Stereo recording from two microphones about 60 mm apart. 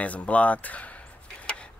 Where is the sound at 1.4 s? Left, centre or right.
Centre.